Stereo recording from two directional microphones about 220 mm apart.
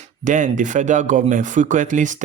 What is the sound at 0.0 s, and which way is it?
Speech, 35° right (ahead or behind).